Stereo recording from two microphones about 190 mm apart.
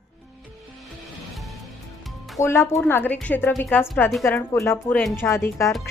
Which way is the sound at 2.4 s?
15° left (ahead or behind).